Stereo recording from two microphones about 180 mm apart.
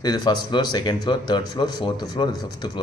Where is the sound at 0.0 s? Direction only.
20° left (ahead or behind).